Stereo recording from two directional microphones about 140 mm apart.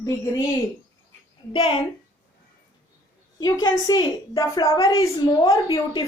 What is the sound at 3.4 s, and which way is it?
A woman's voice, 25° left (ahead or behind).